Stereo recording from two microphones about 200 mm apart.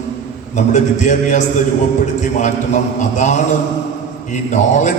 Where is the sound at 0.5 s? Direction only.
35° left (ahead or behind).